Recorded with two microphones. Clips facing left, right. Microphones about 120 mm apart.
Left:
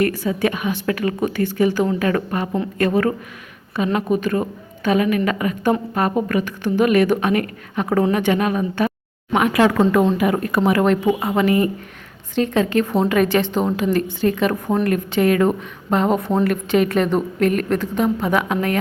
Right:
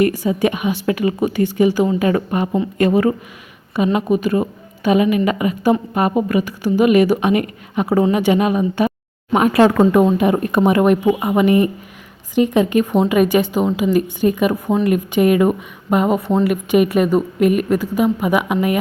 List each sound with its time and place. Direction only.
0.0 s speech: 15° right (ahead or behind)
9.3 s a woman's voice: 30° right (ahead or behind)
9.7 s speech: 15° right (ahead or behind)
10.2 s a woman's voice: 25° right (ahead or behind)